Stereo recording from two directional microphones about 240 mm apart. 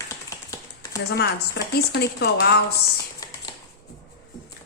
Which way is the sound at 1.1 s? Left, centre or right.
Left.